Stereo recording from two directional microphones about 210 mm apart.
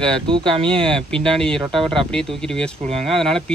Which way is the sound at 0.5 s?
25° right (ahead or behind).